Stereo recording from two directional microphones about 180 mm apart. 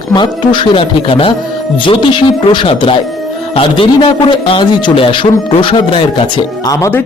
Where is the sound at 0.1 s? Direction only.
25° left (ahead or behind).